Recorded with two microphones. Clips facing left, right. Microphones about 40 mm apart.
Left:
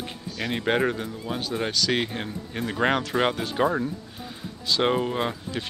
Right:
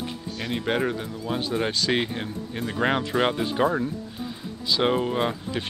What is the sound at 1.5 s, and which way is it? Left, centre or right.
Speech, centre.